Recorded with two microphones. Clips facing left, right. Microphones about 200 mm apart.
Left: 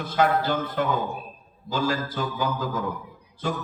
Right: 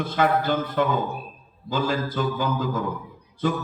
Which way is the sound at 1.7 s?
55° right (ahead or behind).